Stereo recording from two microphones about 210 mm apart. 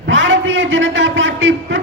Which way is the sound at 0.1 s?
65° right (ahead or behind).